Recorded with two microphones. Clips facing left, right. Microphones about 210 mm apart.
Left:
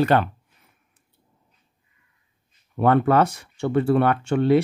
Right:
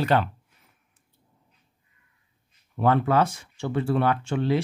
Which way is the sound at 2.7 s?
55° left (ahead or behind).